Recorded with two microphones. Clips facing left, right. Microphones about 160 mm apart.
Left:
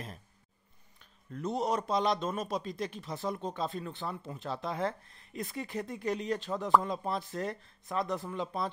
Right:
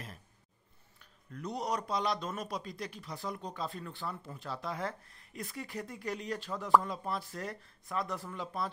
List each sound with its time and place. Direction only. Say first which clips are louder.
1.3 s a man's voice: left 4 dB; 25° left (ahead or behind)